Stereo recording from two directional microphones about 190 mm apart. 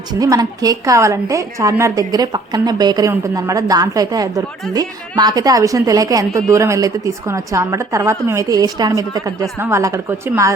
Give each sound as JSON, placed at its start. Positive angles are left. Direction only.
{"t": 0.1, "sound": "a woman's voice", "side_deg": -20}